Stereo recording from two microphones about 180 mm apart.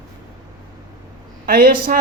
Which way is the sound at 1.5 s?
55° right (ahead or behind).